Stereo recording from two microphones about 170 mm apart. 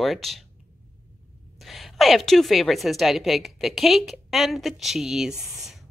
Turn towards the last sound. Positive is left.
turn(degrees=0)  # may be behind; listen again after turning